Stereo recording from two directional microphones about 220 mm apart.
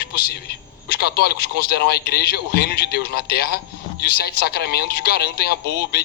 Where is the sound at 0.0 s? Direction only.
45° left (ahead or behind).